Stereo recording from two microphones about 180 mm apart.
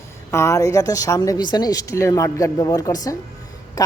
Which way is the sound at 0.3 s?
15° left (ahead or behind).